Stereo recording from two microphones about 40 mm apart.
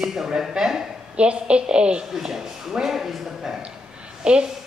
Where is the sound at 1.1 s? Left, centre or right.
Right.